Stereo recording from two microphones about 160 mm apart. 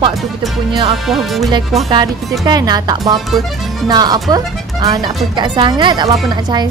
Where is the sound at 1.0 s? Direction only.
Centre (ahead or behind).